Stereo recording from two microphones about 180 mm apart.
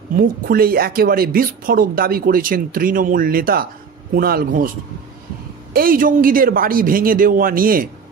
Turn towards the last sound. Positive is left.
turn(degrees=-50)  # may be behind; listen again after turning